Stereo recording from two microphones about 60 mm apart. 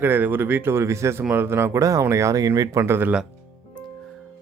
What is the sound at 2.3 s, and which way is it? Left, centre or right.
Speech, right.